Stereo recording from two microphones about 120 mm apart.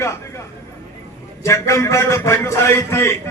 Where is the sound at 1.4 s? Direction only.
25° left (ahead or behind).